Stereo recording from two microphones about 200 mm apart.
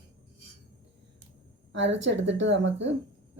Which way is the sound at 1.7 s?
65° right (ahead or behind).